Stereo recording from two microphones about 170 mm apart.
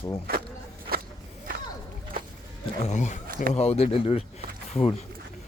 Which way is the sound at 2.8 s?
45° left (ahead or behind).